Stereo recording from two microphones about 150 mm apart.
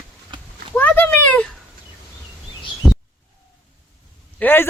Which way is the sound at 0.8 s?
10° left (ahead or behind).